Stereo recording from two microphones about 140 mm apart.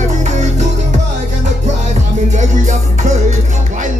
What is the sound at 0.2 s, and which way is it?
Music, 55° right (ahead or behind).